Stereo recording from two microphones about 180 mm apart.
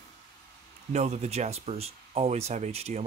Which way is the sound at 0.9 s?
40° right (ahead or behind).